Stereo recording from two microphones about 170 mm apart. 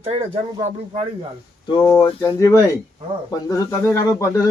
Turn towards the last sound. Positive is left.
turn(degrees=20)  # may be behind; listen again after turning